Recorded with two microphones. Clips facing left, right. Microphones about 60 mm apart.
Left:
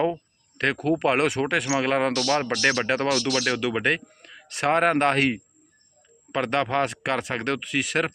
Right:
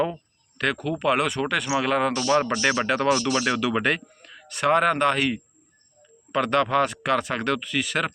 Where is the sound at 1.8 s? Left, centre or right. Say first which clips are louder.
Even; left.